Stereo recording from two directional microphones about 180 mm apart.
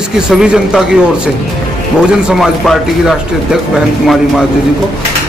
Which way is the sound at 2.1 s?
Centre (ahead or behind).